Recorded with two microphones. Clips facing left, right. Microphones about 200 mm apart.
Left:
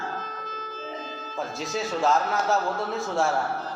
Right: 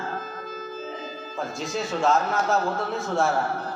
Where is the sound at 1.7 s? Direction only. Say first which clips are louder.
Right 1 dB; centre (ahead or behind).